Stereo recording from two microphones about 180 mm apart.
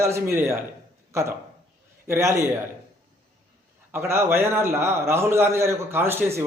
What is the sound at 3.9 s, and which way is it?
A man's voice, 15° right (ahead or behind).